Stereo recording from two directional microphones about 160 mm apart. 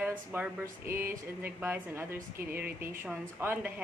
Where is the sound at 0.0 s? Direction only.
10° right (ahead or behind).